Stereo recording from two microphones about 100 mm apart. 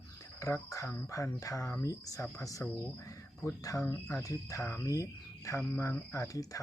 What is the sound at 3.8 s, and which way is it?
Speech, 30° left (ahead or behind).